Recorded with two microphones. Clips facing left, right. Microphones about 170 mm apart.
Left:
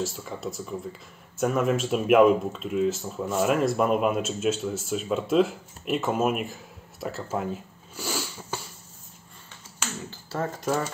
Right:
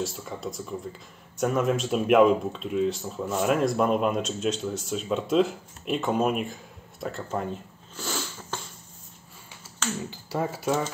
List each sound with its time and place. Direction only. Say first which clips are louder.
0.0 s speech: left 1 dB; centre (ahead or behind)
10.0 s speech: left 1 dB; 10° right (ahead or behind)